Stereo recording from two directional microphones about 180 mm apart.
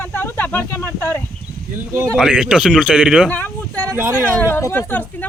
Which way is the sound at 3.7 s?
15° right (ahead or behind).